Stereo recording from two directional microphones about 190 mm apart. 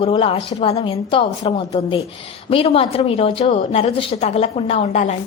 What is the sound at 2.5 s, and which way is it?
A woman's voice, 30° left (ahead or behind).